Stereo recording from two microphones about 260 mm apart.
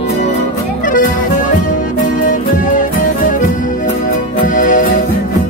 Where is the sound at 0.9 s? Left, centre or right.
Left.